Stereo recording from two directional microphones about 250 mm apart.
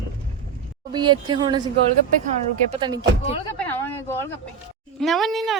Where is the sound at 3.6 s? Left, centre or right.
Centre.